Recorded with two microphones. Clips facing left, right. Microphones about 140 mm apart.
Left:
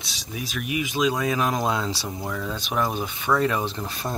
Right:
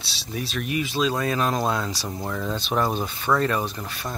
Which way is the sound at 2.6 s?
15° left (ahead or behind).